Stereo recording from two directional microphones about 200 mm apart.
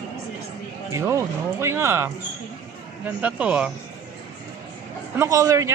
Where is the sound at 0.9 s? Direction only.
15° right (ahead or behind).